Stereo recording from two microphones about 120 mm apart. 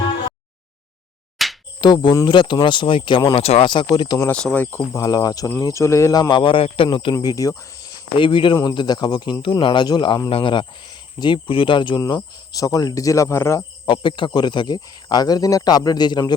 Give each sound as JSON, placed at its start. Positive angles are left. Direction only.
{"t": 1.4, "sound": "a sound", "side_deg": 0}
{"t": 1.8, "sound": "speech", "side_deg": 40}
{"t": 3.3, "sound": "speech", "side_deg": 55}
{"t": 3.8, "sound": "speech", "side_deg": 35}
{"t": 4.3, "sound": "speech", "side_deg": 15}
{"t": 6.1, "sound": "speech", "side_deg": 40}
{"t": 8.1, "sound": "speech", "side_deg": 45}
{"t": 13.8, "sound": "speech", "side_deg": 45}